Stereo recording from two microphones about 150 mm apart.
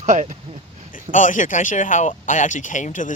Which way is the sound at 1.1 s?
60° left (ahead or behind).